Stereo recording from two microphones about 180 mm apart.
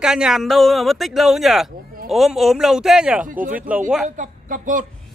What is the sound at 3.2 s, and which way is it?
A woman's voice, 50° right (ahead or behind).